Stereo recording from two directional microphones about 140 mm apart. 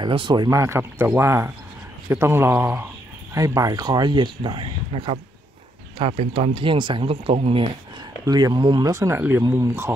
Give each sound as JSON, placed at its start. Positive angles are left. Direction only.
{"t": 0.0, "sound": "a man's voice", "side_deg": -35}
{"t": 8.3, "sound": "speech", "side_deg": -30}